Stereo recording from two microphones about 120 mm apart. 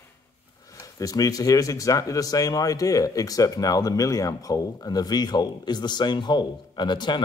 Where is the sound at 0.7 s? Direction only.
25° left (ahead or behind).